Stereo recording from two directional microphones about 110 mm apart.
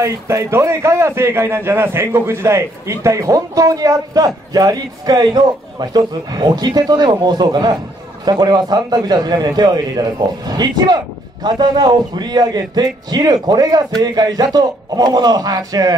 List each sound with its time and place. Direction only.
0.0 s a man's voice: 30° right (ahead or behind)